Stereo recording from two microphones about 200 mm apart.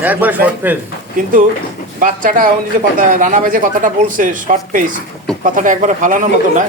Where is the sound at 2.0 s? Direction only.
45° right (ahead or behind).